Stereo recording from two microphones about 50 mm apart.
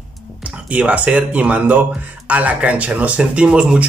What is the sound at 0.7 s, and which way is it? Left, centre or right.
A man's voice, right.